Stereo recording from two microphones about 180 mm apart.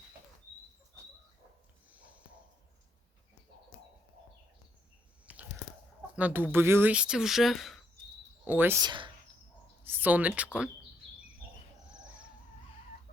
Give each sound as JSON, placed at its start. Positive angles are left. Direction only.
{"t": 5.2, "sound": "biting", "side_deg": -10}
{"t": 6.1, "sound": "speech", "side_deg": -10}
{"t": 8.4, "sound": "speech", "side_deg": -10}
{"t": 8.8, "sound": "speech", "side_deg": -25}
{"t": 9.8, "sound": "speech", "side_deg": -10}